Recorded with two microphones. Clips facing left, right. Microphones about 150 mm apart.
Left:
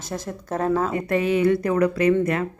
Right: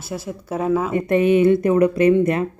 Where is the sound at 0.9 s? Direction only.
20° right (ahead or behind).